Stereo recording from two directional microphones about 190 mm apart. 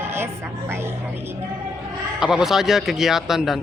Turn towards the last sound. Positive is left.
turn(degrees=0)  # may be behind; listen again after turning